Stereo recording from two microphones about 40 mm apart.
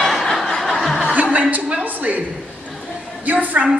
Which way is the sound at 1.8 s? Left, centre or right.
Right.